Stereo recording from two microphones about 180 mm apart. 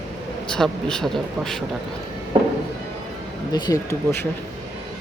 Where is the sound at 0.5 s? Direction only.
5° left (ahead or behind).